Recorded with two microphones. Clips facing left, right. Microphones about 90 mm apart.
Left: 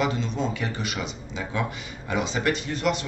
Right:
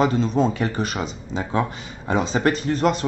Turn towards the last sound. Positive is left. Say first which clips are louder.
# right 6 dB
turn(degrees=-40)  # may be behind; listen again after turning